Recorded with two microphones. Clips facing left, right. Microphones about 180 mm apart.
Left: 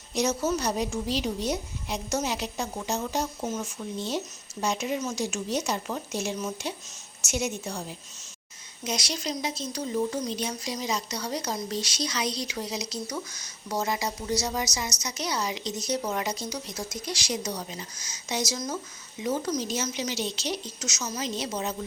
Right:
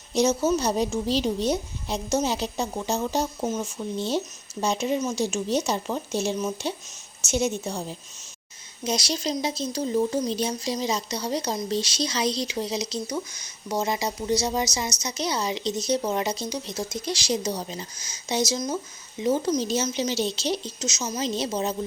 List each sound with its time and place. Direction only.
0.1 s speech: 25° right (ahead or behind)